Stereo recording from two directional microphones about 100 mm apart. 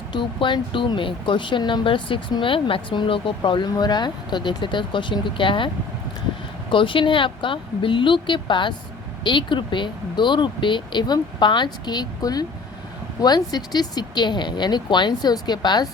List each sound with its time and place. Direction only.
0.1 s speech: 55° left (ahead or behind)